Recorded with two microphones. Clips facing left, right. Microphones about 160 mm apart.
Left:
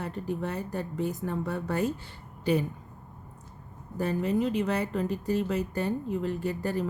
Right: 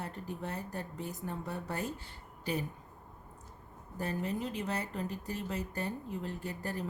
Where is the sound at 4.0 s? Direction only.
90° left.